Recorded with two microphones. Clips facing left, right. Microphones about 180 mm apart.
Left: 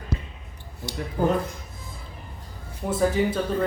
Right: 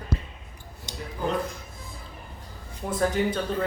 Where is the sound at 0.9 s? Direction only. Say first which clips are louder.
Left 6 dB; 20° right (ahead or behind).